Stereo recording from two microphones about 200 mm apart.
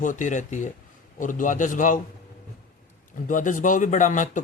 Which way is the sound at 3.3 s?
40° left (ahead or behind).